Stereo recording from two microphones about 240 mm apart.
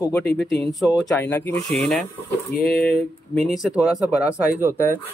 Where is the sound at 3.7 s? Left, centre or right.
Centre.